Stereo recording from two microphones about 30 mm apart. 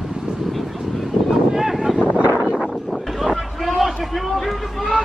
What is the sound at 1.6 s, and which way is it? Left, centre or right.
Wind noise, centre.